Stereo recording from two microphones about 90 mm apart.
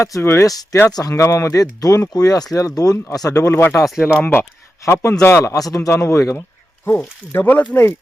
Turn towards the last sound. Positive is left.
turn(degrees=20)  # may be behind; listen again after turning